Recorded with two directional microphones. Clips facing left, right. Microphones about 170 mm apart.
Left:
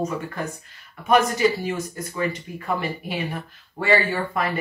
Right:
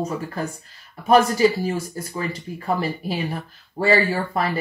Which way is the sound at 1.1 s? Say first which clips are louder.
Right 3 dB; 35° right (ahead or behind).